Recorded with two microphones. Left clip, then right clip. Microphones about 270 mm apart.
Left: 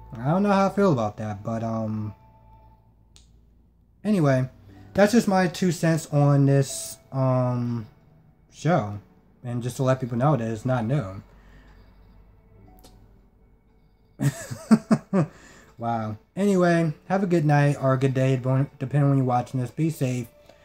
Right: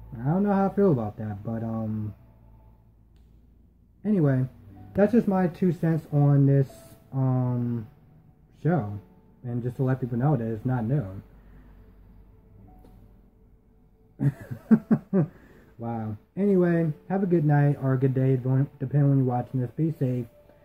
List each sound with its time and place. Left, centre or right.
0.1 s speech: left
4.0 s speech: centre
14.1 s speech: left